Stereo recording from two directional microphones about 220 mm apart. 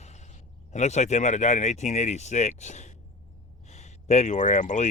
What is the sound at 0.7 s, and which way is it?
Speech, 30° left (ahead or behind).